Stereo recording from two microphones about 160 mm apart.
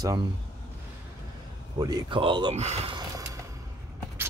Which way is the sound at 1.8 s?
25° right (ahead or behind).